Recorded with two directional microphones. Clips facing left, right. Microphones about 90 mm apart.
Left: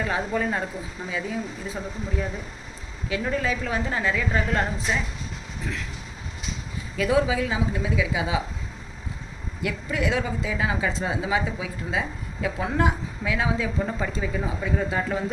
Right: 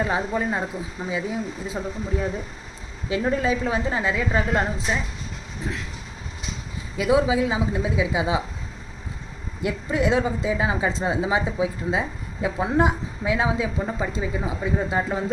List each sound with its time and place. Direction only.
0.0 s a woman's voice: 20° right (ahead or behind)
3.1 s a woman's voice: 25° right (ahead or behind)
6.9 s a woman's voice: 20° right (ahead or behind)
9.6 s a woman's voice: 25° right (ahead or behind)